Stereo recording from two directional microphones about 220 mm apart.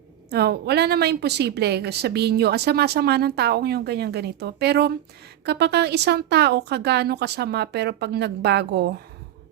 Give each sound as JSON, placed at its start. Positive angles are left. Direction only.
{"t": 0.3, "sound": "a woman's voice", "side_deg": -45}